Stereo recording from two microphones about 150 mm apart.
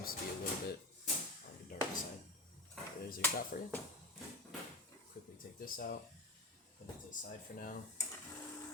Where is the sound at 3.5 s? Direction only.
85° left.